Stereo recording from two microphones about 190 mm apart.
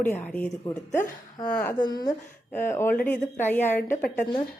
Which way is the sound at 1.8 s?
20° left (ahead or behind).